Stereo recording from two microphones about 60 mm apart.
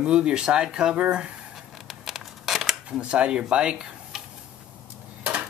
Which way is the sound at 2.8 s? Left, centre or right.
Centre.